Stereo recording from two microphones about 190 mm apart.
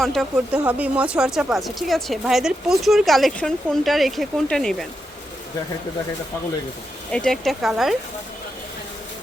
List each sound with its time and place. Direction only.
0.0 s a woman's voice: centre (ahead or behind)
7.1 s a woman's voice: 5° left (ahead or behind)